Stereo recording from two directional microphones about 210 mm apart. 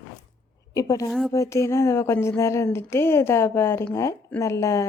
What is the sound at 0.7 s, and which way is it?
A woman's voice, 15° left (ahead or behind).